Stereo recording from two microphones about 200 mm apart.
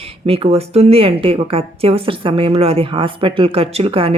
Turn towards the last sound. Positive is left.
turn(degrees=-30)  # may be behind; listen again after turning